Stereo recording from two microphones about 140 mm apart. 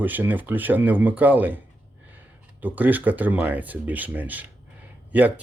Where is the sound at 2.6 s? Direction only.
10° right (ahead or behind).